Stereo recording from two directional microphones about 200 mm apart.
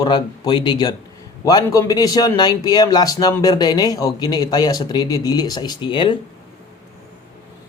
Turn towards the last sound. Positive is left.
turn(degrees=25)  # may be behind; listen again after turning